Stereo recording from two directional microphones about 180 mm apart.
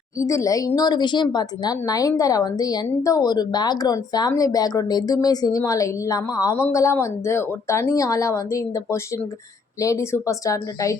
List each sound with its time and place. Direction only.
0.2 s speech: 15° left (ahead or behind)